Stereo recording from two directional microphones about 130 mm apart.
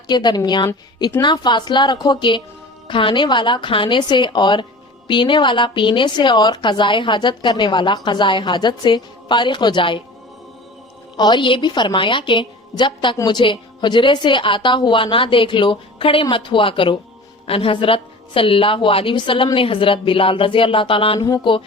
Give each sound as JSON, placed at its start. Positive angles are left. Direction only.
{"t": 0.1, "sound": "speech", "side_deg": 35}
{"t": 11.2, "sound": "a woman's voice", "side_deg": 35}
{"t": 21.2, "sound": "speech", "side_deg": 30}